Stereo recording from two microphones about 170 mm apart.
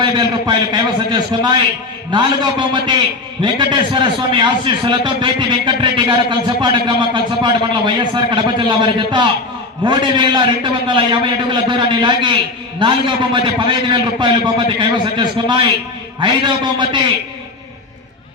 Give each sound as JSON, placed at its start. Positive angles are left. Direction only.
{"t": 0.0, "sound": "a man's voice", "side_deg": -25}